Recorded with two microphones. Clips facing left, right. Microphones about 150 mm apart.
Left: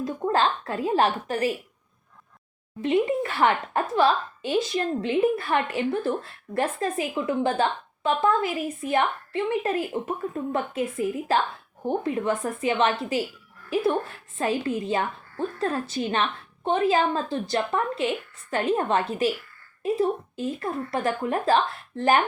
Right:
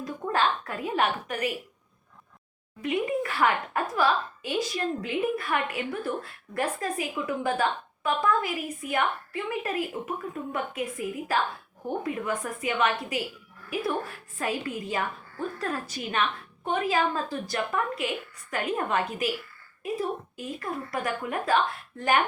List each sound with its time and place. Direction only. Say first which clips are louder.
0.0 s a woman's voice: left 4 dB; 30° left (ahead or behind)
2.8 s a woman's voice: left 5 dB; 30° left (ahead or behind)